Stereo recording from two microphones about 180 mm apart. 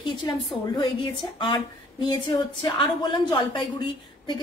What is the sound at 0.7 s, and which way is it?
A woman's voice, 25° left (ahead or behind).